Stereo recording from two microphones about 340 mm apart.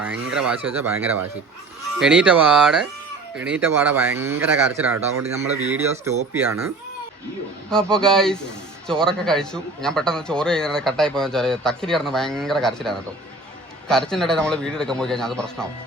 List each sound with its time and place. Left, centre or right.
0.0 s a man's voice: centre
2.0 s a man's voice: centre
4.9 s speech: right
5.7 s a man's voice: centre